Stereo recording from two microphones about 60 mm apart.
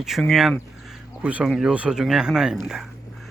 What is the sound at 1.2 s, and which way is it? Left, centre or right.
Speech, right.